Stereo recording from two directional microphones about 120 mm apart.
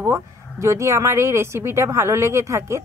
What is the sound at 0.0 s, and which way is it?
Speech, 25° right (ahead or behind).